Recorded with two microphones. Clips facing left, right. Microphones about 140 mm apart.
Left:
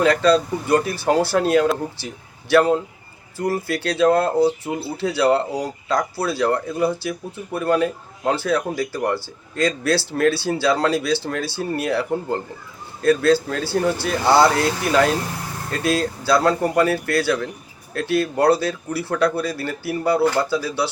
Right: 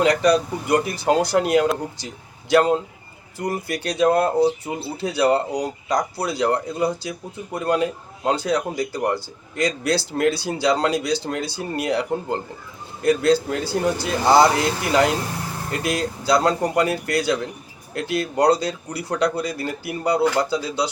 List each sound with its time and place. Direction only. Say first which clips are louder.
0.0 s speech: left 1 dB; 15° right (ahead or behind)